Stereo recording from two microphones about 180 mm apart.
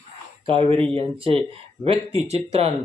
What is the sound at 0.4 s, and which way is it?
Speech, 30° right (ahead or behind).